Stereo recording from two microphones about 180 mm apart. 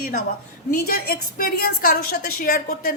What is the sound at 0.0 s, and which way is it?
A woman's voice, 55° left (ahead or behind).